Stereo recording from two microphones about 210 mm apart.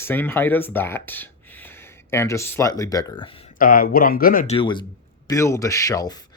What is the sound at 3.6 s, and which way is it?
Speech, 40° left (ahead or behind).